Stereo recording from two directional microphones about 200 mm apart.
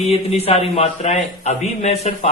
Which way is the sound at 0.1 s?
30° left (ahead or behind).